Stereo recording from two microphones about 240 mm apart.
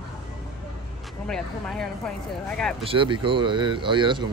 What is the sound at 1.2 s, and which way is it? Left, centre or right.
Speech, centre.